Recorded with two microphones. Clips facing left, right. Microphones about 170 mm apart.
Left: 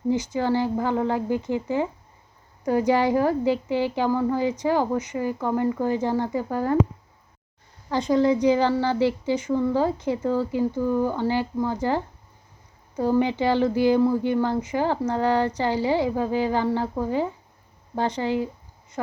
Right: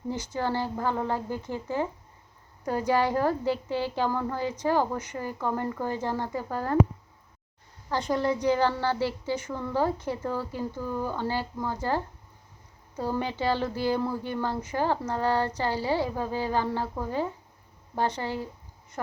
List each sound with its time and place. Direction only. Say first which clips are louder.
0.1 s speech: left 7 dB; 15° left (ahead or behind)
7.9 s speech: left 6 dB; 15° left (ahead or behind)